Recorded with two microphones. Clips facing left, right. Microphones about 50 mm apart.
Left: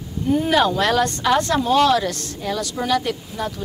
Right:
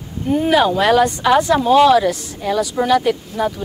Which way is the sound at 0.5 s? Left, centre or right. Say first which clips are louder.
Right 6 dB; centre.